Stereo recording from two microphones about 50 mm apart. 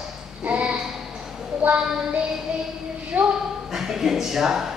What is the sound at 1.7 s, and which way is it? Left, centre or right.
Speech, right.